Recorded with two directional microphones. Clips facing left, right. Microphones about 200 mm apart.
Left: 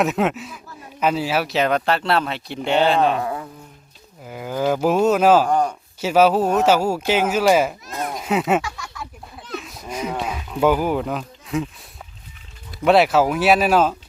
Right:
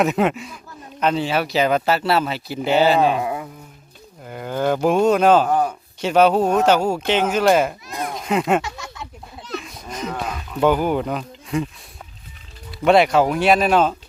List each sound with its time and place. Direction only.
0.0 s speech: centre (ahead or behind)
4.2 s speech: 5° left (ahead or behind)
5.5 s speech: 5° right (ahead or behind)
6.0 s speech: 5° left (ahead or behind)
8.6 s a sound: 20° right (ahead or behind)
9.6 s a sound: centre (ahead or behind)
12.8 s speech: centre (ahead or behind)